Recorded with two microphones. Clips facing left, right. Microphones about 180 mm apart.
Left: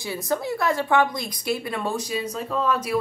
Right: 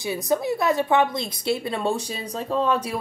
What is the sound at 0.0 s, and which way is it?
A woman's voice, 20° right (ahead or behind).